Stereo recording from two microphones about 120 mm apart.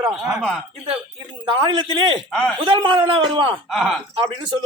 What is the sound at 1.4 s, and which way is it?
Speech, 40° right (ahead or behind).